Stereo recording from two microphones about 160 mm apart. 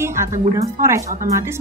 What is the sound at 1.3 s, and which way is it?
Speech, 15° right (ahead or behind).